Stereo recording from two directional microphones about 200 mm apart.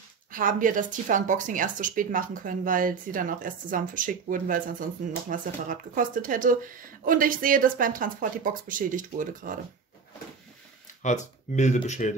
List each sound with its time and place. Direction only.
0.3 s speech: 40° right (ahead or behind)
11.0 s speech: 35° left (ahead or behind)